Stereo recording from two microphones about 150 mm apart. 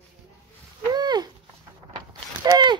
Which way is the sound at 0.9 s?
25° right (ahead or behind).